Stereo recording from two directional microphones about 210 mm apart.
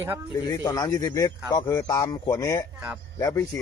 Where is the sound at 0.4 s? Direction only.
15° left (ahead or behind).